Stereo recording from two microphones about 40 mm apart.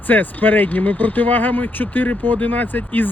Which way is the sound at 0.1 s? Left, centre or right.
Left.